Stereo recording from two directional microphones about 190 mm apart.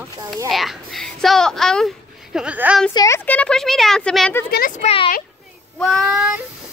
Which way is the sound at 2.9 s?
20° left (ahead or behind).